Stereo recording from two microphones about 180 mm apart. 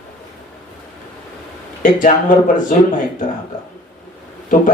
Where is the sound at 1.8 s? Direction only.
50° left (ahead or behind).